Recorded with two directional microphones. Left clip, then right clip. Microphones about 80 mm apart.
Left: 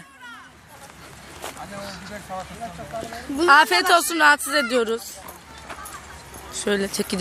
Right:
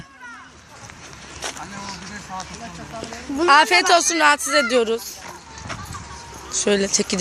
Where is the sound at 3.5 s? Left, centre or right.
Centre.